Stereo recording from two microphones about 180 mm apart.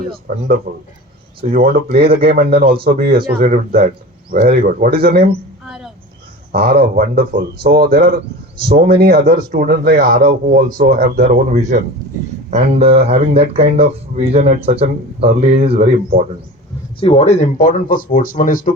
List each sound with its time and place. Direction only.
1.5 s speech: 55° right (ahead or behind)
5.6 s a sound: 5° right (ahead or behind)
6.5 s speech: 60° right (ahead or behind); by 15.9 s 30° right (ahead or behind)
17.0 s speech: 35° left (ahead or behind)